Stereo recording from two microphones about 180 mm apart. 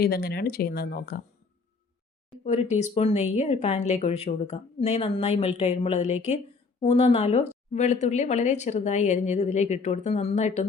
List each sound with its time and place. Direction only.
0.0 s speech: 60° left (ahead or behind)
2.4 s speech: 35° left (ahead or behind)